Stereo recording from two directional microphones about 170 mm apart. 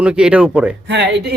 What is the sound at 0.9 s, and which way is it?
Speech, 85° right.